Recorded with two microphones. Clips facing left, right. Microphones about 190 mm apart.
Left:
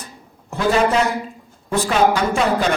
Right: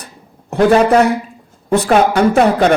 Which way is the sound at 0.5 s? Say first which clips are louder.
Right 7 dB; 60° right (ahead or behind).